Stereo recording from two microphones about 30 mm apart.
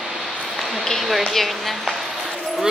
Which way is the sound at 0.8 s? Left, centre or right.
Centre.